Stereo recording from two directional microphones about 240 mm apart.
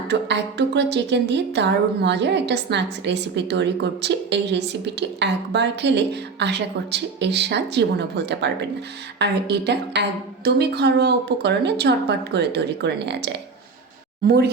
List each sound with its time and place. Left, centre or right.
0.1 s a woman's voice: right